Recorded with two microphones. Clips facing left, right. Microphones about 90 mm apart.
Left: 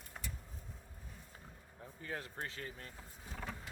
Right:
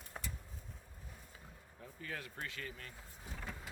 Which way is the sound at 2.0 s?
30° left (ahead or behind).